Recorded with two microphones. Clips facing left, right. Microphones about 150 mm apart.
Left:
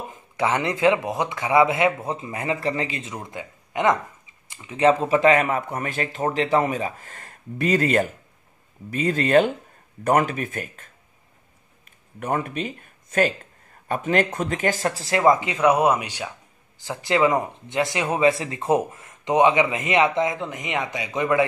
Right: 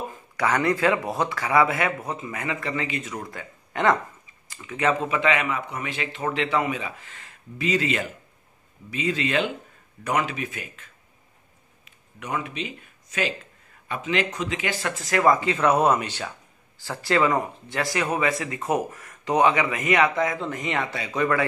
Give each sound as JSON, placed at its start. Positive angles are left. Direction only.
{"t": 0.1, "sound": "speech", "side_deg": 25}
{"t": 4.5, "sound": "speech", "side_deg": 30}
{"t": 11.8, "sound": "a sound", "side_deg": 50}
{"t": 13.8, "sound": "speech", "side_deg": 45}